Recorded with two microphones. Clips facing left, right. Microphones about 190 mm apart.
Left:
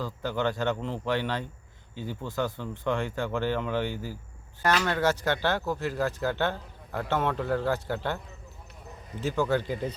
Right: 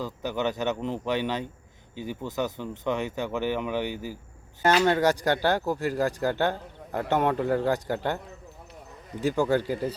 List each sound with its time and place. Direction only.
0.0 s a man's voice: 15° right (ahead or behind)
4.9 s a man's voice: 15° right (ahead or behind)
9.2 s a man's voice: 15° right (ahead or behind)